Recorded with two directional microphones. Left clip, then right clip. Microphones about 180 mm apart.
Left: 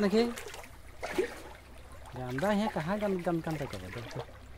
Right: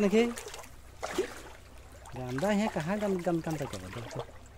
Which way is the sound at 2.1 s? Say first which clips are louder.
Even; 15° right (ahead or behind).